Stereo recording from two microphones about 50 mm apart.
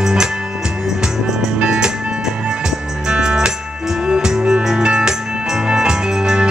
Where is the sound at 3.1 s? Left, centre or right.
Centre.